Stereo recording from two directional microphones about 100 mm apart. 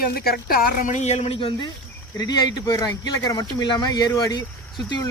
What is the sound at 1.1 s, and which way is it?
Speech, 75° left (ahead or behind).